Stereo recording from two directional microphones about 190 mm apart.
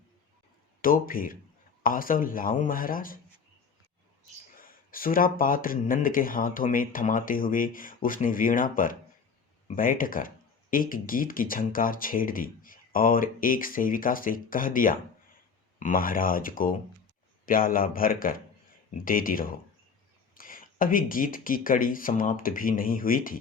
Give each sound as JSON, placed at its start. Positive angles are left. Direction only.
{"t": 0.8, "sound": "speech", "side_deg": 50}
{"t": 4.6, "sound": "speech", "side_deg": 50}